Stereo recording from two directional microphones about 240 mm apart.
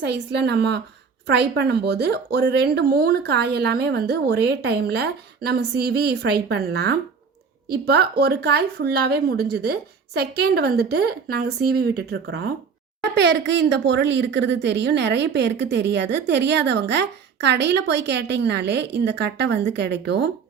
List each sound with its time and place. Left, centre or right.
0.0 s a woman's voice: right